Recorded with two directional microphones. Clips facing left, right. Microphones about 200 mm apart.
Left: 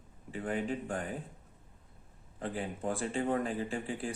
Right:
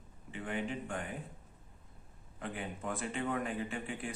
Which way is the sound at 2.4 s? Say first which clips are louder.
Left 4 dB; 35° left (ahead or behind).